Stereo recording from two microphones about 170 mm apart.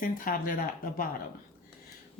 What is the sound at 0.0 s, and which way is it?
Speech, 55° left (ahead or behind).